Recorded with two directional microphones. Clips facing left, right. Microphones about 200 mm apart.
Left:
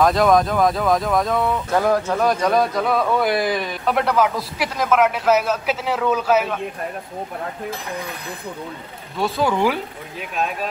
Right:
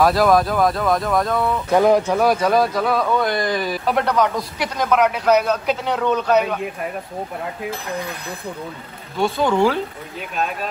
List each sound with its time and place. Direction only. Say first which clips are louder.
0.0 s a man's voice: even; 5° right (ahead or behind)
1.7 s speech: right 6 dB; 15° right (ahead or behind)
2.1 s a man's voice: right 2 dB; 5° right (ahead or behind)
9.1 s a man's voice: right 2 dB; centre (ahead or behind)